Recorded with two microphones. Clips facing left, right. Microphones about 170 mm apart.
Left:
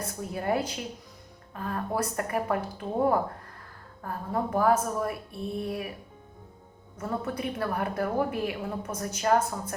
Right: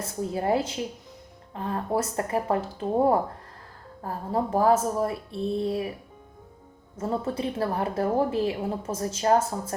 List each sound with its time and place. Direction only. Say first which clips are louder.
0.2 s a woman's voice: right 4 dB; 25° right (ahead or behind)
6.9 s a woman's voice: right 4 dB; 25° right (ahead or behind)